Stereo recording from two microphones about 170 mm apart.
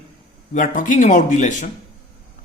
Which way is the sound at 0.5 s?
50° left (ahead or behind).